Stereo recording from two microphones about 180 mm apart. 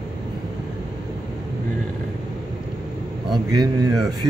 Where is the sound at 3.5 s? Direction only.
20° right (ahead or behind).